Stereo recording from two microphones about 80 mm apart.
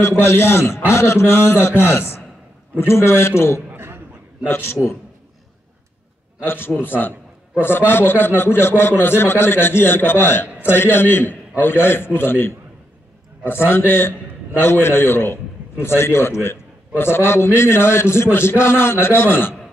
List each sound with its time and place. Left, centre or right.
0.0 s a man's voice: left
3.7 s a sound: right
4.5 s a man's voice: left
6.4 s a man's voice: left